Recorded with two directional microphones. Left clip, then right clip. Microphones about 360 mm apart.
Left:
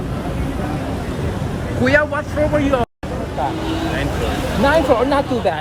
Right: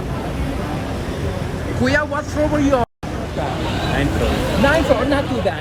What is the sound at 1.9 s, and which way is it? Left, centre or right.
Vehicle, centre.